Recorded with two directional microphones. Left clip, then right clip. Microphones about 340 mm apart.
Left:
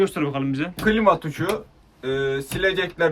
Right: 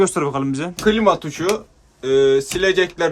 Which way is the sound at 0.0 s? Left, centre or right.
Centre.